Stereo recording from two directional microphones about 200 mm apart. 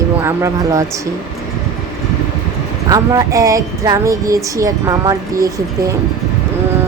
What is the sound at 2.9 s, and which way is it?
Speech, 15° right (ahead or behind).